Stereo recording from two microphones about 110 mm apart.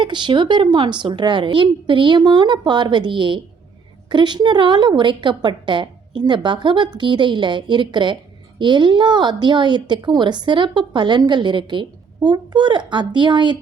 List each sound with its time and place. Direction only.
0.0 s a woman's voice: 45° right (ahead or behind)